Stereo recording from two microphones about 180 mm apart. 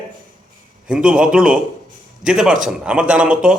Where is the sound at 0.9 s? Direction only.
5° right (ahead or behind).